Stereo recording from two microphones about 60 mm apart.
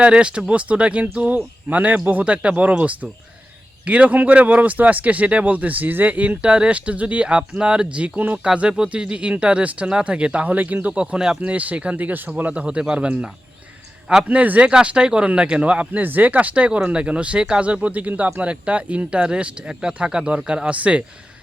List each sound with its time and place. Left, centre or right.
0.0 s speech: centre
8.4 s speech: centre